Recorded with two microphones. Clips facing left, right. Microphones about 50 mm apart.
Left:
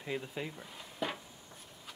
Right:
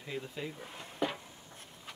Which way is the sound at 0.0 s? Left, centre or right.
Centre.